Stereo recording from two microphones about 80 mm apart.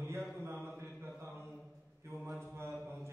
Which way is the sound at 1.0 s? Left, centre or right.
Right.